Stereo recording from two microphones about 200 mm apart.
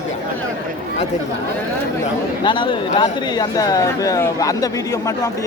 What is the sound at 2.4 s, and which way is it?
Speech, 25° left (ahead or behind).